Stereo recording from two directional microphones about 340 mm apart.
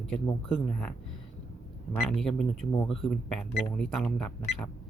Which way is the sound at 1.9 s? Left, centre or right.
Centre.